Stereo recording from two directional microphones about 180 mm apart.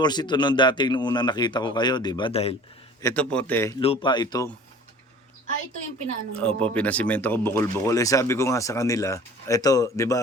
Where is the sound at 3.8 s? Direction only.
30° left (ahead or behind).